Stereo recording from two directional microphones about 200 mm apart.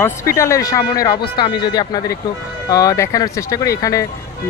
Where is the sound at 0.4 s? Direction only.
15° left (ahead or behind).